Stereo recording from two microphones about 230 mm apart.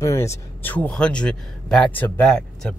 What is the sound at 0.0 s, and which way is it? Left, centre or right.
Speech, centre.